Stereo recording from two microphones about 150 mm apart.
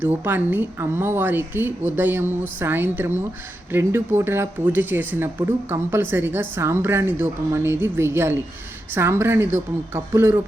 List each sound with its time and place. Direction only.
0.0 s speech: 15° right (ahead or behind)